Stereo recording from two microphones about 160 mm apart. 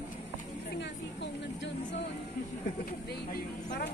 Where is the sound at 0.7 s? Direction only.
90° left.